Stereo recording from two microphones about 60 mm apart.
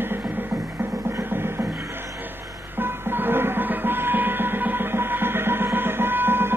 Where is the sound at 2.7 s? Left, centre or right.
Right.